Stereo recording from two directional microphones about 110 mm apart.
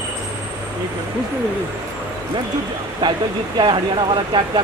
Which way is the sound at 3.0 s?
45° right (ahead or behind).